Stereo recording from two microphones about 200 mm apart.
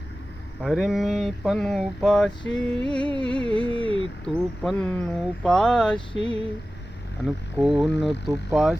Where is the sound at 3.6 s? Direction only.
25° left (ahead or behind).